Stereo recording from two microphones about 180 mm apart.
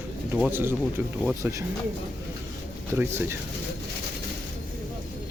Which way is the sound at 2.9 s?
15° right (ahead or behind).